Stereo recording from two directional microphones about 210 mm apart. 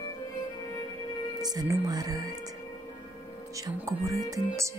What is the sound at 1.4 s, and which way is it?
Speech, 20° right (ahead or behind).